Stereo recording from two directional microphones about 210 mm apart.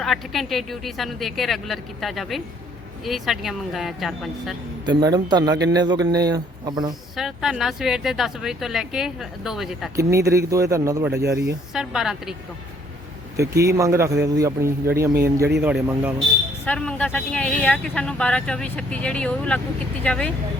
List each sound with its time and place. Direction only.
0.0 s speech: centre (ahead or behind)
4.9 s speech: 20° right (ahead or behind)
7.2 s speech: centre (ahead or behind)
9.9 s a man's voice: 15° right (ahead or behind)
11.7 s speech: centre (ahead or behind)
13.3 s a man's voice: 15° right (ahead or behind)
16.6 s speech: 5° left (ahead or behind)